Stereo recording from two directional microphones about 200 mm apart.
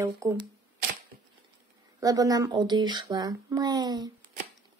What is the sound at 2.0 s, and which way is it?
Speech, 20° right (ahead or behind).